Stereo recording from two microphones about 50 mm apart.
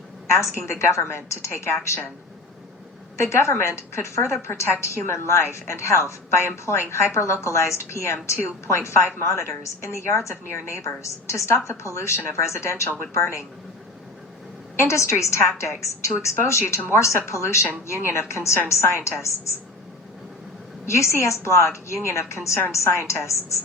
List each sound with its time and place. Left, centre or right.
0.3 s a woman's voice: left
3.2 s a woman's voice: left
13.1 s a woman's voice: left
14.8 s a woman's voice: left
20.8 s a woman's voice: left